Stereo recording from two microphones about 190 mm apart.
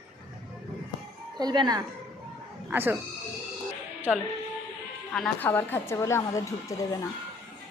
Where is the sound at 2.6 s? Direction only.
10° right (ahead or behind).